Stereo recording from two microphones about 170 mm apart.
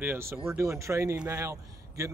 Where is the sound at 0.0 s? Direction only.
15° right (ahead or behind).